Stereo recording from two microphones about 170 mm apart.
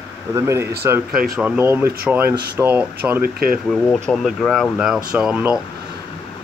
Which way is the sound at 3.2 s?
60° right (ahead or behind).